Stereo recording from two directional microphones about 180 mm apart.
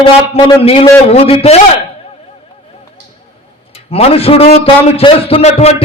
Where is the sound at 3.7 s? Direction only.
35° left (ahead or behind).